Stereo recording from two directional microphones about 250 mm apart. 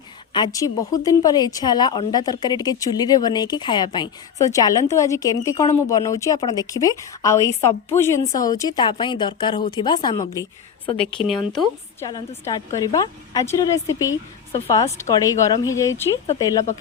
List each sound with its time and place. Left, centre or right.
0.3 s a woman's voice: centre
11.2 s speech: centre
12.0 s a woman's voice: centre